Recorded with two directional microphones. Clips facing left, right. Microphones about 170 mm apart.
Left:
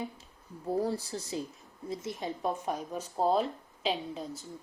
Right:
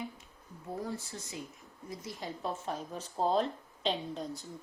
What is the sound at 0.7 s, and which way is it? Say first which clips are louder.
Speech: left 8 dB; 35° left (ahead or behind).